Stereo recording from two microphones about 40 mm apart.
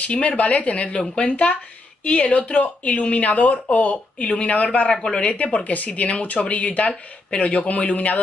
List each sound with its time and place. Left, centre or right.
0.0 s speech: left